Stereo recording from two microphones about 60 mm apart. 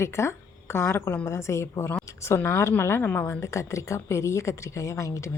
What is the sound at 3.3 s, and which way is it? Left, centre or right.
A woman's voice, left.